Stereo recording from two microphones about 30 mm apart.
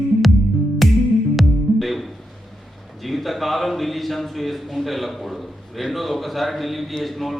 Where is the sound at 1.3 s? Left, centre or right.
Centre.